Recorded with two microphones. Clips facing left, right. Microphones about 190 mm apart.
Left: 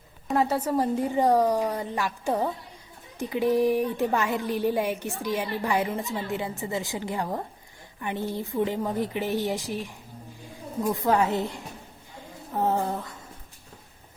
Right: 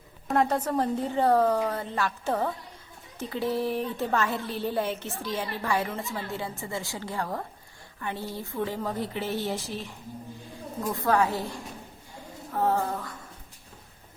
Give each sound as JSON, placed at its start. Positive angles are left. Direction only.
{"t": 0.3, "sound": "a woman's voice", "side_deg": 5}
{"t": 10.9, "sound": "a woman's voice", "side_deg": 20}
{"t": 12.5, "sound": "a woman's voice", "side_deg": 20}